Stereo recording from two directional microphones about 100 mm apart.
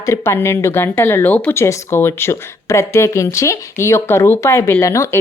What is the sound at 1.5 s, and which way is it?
Speech, 30° left (ahead or behind).